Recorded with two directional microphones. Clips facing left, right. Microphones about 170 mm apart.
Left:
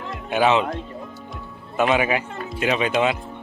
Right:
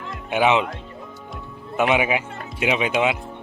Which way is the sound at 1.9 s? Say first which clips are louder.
Even; 15° right (ahead or behind).